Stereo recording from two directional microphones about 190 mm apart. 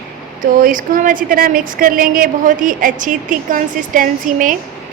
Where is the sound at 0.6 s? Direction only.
45° right (ahead or behind).